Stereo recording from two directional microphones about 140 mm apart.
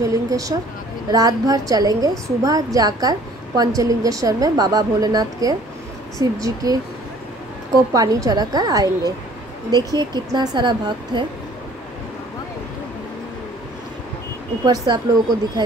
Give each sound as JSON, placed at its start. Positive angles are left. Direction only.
{"t": 0.0, "sound": "a woman's voice", "side_deg": -25}
{"t": 14.6, "sound": "a woman's voice", "side_deg": -30}